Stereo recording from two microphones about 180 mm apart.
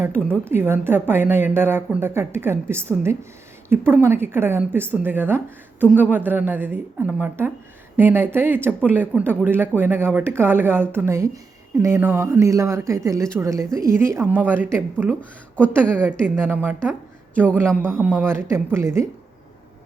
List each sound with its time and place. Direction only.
0.0 s speech: 10° right (ahead or behind)
15.2 s speech: 5° left (ahead or behind)
16.0 s speech: 10° right (ahead or behind)
17.7 s a man's voice: 5° left (ahead or behind)
18.0 s speech: 10° right (ahead or behind)